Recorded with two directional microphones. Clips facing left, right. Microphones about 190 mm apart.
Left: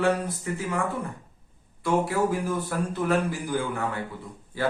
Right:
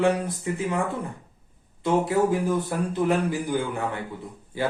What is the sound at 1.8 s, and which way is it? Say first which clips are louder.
A man's voice: right 2 dB; 20° right (ahead or behind).